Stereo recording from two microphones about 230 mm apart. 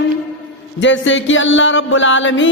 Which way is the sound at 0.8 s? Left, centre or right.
Left.